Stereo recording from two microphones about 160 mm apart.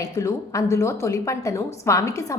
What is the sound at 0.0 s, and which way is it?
A woman's voice, 20° left (ahead or behind).